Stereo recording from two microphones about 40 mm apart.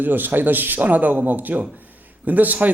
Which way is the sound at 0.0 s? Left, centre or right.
Right.